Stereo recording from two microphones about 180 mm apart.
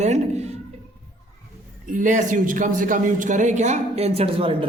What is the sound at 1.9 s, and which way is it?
A man's voice, 45° right (ahead or behind).